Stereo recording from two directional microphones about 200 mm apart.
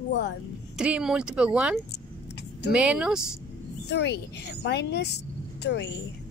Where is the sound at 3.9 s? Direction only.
55° left (ahead or behind).